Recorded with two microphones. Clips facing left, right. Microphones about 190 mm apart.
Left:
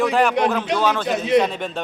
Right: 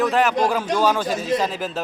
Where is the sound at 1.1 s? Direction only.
65° left (ahead or behind).